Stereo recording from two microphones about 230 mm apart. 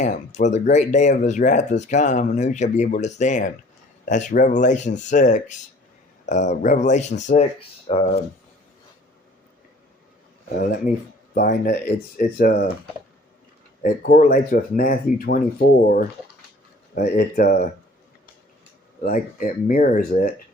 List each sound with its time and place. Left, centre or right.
0.0 s speech: left
10.5 s speech: left
13.8 s speech: left
16.9 s speech: left
19.0 s speech: left